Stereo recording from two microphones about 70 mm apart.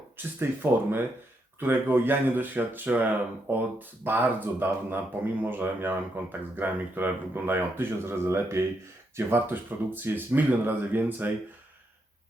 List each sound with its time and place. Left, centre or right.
0.2 s speech: right